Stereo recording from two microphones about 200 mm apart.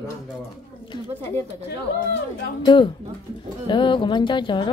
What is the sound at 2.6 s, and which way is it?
A woman's voice, 25° left (ahead or behind).